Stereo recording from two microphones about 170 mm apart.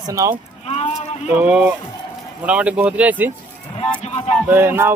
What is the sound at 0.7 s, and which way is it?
Speech, 40° left (ahead or behind).